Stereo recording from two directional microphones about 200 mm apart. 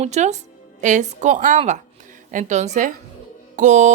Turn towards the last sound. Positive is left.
turn(degrees=-35)  # may be behind; listen again after turning